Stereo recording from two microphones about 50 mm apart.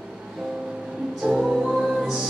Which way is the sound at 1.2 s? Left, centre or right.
Centre.